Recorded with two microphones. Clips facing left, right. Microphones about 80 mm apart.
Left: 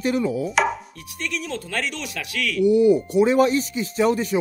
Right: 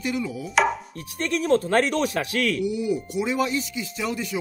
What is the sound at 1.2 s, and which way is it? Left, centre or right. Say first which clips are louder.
Speech: right 8 dB; right.